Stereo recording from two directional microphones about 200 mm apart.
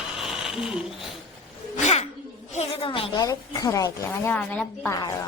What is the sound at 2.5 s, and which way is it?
A woman's voice, 30° left (ahead or behind).